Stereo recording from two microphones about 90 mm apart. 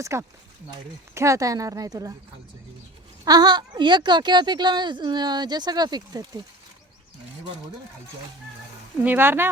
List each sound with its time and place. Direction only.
0.0 s a woman's voice: 30° right (ahead or behind)
3.2 s a woman's voice: 50° right (ahead or behind)
9.0 s speech: 25° right (ahead or behind)